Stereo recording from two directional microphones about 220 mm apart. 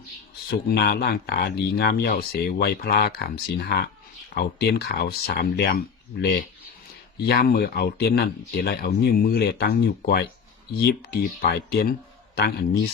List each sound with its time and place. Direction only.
0.7 s speech: 45° left (ahead or behind)